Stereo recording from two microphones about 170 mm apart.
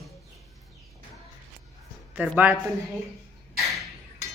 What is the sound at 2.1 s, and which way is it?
Speech, 5° right (ahead or behind).